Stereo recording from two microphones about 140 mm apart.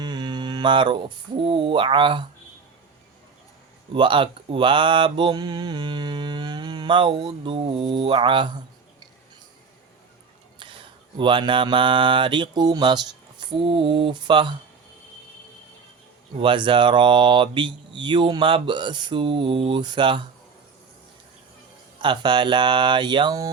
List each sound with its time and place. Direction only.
0.0 s speech: 30° right (ahead or behind)
3.9 s speech: 35° right (ahead or behind)
11.2 s speech: 35° right (ahead or behind)
16.4 s speech: 35° right (ahead or behind)
22.0 s speech: 35° right (ahead or behind)